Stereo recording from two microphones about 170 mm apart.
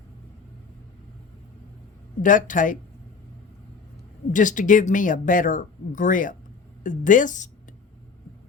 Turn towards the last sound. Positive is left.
turn(degrees=50)  # may be behind; listen again after turning